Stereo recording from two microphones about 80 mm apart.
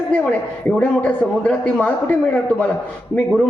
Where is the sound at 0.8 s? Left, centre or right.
Centre.